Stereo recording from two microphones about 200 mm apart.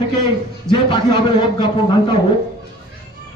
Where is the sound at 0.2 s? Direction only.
20° left (ahead or behind).